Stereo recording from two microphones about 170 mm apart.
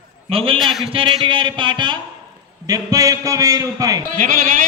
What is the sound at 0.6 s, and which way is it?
Speech, centre (ahead or behind).